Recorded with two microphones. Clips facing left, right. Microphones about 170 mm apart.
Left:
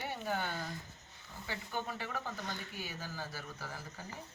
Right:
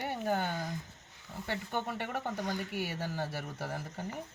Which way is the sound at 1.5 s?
60° right (ahead or behind).